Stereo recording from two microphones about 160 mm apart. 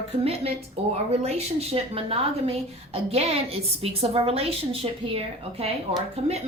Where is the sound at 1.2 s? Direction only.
40° right (ahead or behind).